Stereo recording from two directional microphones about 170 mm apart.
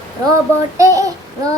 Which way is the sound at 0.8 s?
20° right (ahead or behind).